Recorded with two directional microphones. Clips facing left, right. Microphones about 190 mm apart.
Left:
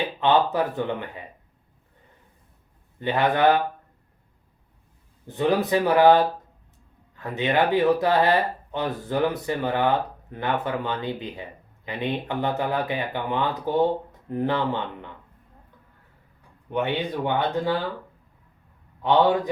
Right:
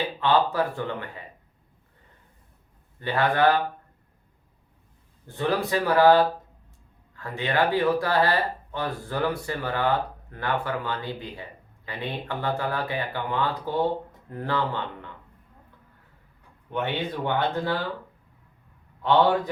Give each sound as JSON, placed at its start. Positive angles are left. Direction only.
{"t": 0.2, "sound": "speech", "side_deg": 20}
{"t": 3.0, "sound": "speech", "side_deg": 20}
{"t": 5.3, "sound": "speech", "side_deg": 20}
{"t": 16.7, "sound": "speech", "side_deg": 15}